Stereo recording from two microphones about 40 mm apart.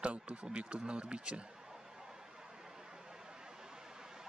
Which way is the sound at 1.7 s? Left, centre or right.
Centre.